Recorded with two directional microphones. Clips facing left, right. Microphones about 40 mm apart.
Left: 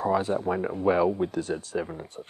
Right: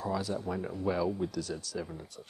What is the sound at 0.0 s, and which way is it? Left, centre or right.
Speech, left.